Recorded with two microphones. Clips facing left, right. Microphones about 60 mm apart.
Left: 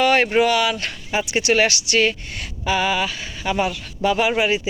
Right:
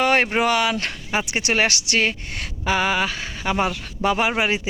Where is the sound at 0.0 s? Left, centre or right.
Right.